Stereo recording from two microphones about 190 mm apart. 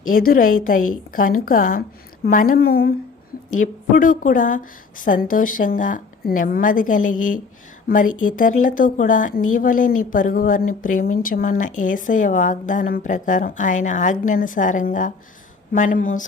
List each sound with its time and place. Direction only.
0.1 s speech: 50° left (ahead or behind)